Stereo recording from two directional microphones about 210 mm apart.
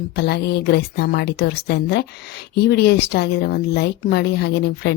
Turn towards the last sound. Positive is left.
turn(degrees=50)  # may be behind; listen again after turning